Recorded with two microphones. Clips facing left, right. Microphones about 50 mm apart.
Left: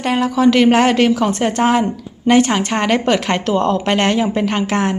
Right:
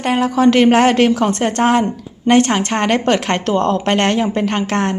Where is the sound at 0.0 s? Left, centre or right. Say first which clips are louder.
Right 1 dB; centre.